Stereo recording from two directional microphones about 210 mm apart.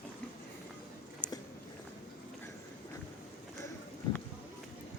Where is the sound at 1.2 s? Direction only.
20° left (ahead or behind).